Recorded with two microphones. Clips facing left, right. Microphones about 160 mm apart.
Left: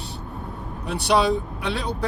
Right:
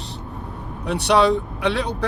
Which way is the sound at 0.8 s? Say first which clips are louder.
Right 3 dB; 65° right (ahead or behind).